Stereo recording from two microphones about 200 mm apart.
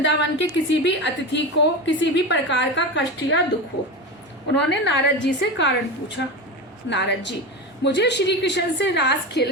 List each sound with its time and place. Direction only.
0.0 s a woman's voice: 60° left (ahead or behind)
4.6 s a woman's voice: 60° left (ahead or behind)